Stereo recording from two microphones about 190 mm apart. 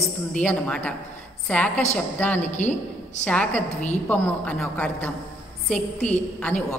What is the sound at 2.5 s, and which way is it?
Speech, 40° left (ahead or behind).